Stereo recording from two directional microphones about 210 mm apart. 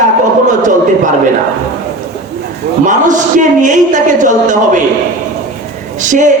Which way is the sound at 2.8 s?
35° right (ahead or behind).